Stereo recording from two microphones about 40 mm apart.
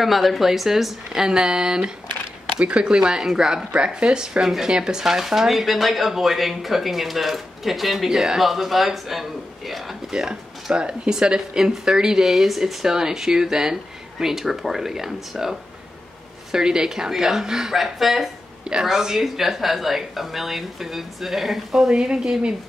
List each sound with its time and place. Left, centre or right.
0.0 s speech: centre
3.7 s speech: right; by 9.9 s centre
10.1 s speech: right
16.5 s speech: centre
18.6 s speech: centre